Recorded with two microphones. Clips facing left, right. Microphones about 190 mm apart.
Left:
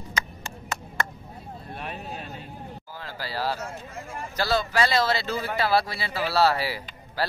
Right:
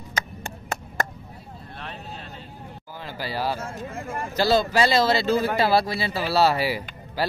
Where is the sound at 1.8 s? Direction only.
15° left (ahead or behind).